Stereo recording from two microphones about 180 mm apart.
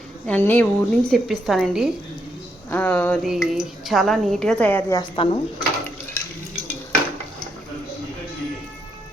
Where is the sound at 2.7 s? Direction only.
10° left (ahead or behind).